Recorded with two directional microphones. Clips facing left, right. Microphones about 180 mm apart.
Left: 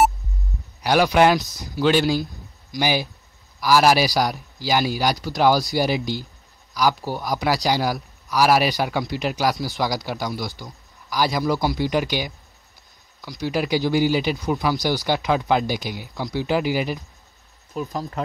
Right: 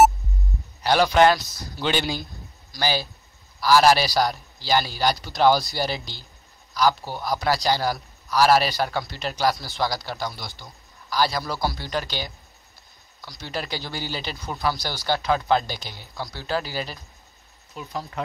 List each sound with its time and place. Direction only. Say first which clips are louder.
0.8 s a man's voice: left 1 dB; 10° left (ahead or behind)
1.8 s speech: left 7 dB; 5° left (ahead or behind)
2.7 s a man's voice: left 3 dB; 15° left (ahead or behind)
17.7 s speech: left 5 dB; 45° left (ahead or behind)